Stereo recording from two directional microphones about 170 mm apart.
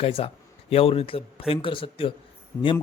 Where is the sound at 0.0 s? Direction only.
35° left (ahead or behind).